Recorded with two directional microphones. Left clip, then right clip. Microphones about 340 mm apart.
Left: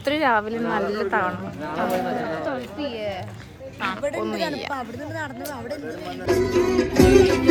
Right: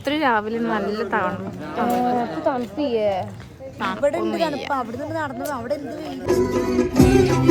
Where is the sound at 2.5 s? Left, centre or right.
Right.